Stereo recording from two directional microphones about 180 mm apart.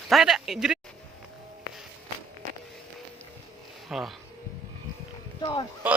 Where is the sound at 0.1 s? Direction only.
Centre (ahead or behind).